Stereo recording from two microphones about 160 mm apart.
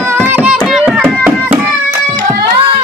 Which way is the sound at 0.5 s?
Centre (ahead or behind).